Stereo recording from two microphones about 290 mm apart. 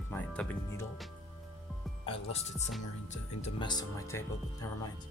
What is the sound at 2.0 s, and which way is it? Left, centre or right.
Speech, centre.